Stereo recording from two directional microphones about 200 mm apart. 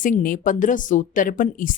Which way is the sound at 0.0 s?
40° left (ahead or behind).